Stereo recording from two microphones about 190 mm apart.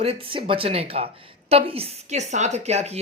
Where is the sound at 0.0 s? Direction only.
30° right (ahead or behind).